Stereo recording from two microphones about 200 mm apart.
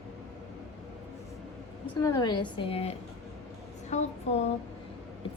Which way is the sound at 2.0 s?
20° left (ahead or behind).